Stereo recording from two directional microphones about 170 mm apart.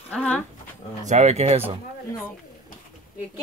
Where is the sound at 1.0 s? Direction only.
40° right (ahead or behind).